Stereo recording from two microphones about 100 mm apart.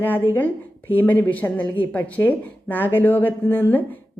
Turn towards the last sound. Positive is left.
turn(degrees=20)  # may be behind; listen again after turning